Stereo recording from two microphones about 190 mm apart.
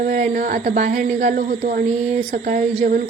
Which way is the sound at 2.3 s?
45° right (ahead or behind).